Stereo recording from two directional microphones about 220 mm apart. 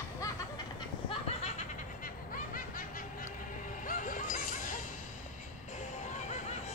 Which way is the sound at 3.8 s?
35° left (ahead or behind).